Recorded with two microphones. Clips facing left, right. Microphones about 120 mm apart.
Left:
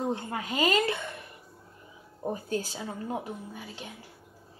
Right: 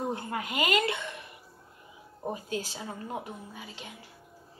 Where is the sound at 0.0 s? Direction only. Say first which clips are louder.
Left 1 dB; 25° left (ahead or behind).